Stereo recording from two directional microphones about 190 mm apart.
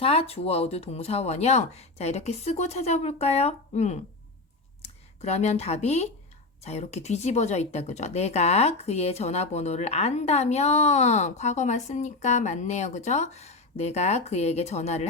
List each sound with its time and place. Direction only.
0.0 s speech: 30° left (ahead or behind)